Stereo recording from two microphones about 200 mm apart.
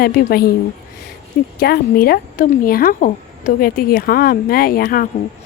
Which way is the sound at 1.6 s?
50° left (ahead or behind).